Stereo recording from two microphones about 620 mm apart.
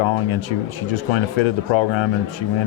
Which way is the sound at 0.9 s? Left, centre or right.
Left.